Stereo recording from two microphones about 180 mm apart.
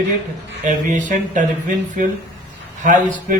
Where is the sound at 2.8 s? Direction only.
45° right (ahead or behind).